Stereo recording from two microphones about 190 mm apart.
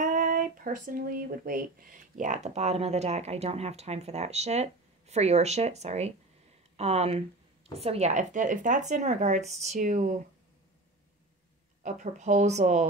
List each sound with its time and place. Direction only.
0.0 s speech: 40° right (ahead or behind)
11.8 s speech: 40° right (ahead or behind)